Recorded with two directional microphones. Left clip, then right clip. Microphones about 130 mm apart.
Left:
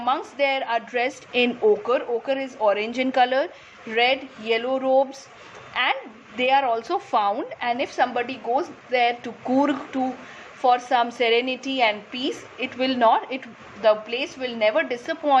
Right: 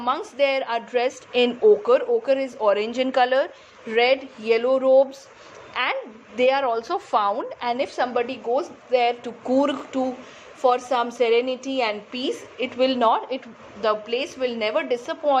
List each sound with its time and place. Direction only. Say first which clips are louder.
0.0 s a woman's voice: right 1 dB; 45° right (ahead or behind)
0.9 s speech: right 4 dB; 15° right (ahead or behind)
1.8 s a woman's voice: right 4 dB; 40° right (ahead or behind)
2.6 s a woman's voice: right 1 dB; 25° right (ahead or behind)
2.9 s speech: right 1 dB; 10° right (ahead or behind)
3.8 s a woman's voice: right 2 dB; 40° right (ahead or behind)
6.7 s speech: even; 15° right (ahead or behind)
7.6 s a woman's voice: left 2 dB; 35° right (ahead or behind)
12.1 s a woman's voice: right 1 dB; 45° right (ahead or behind); by 13.4 s 25° right (ahead or behind)
13.8 s a woman's voice: left 3 dB; 50° right (ahead or behind); by 15.4 s 20° right (ahead or behind)